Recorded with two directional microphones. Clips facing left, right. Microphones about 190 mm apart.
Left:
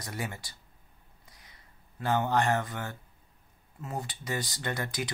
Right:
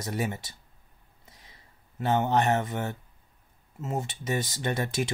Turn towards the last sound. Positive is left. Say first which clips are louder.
# right 5 dB
turn(degrees=-25)  # may be behind; listen again after turning